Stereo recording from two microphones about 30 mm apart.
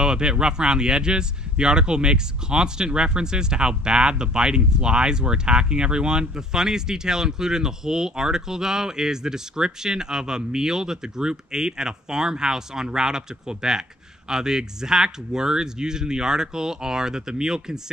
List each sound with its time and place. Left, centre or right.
0.0 s speech: right